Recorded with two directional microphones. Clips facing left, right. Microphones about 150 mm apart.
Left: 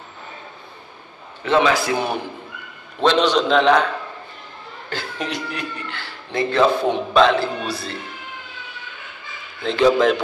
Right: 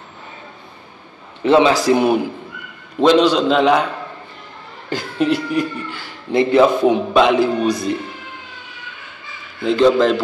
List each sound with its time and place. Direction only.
1.4 s a man's voice: 30° right (ahead or behind)
3.0 s speech: 10° right (ahead or behind)
9.6 s a man's voice: 5° right (ahead or behind)